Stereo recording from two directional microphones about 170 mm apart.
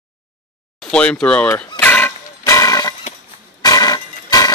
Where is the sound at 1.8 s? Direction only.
10° left (ahead or behind).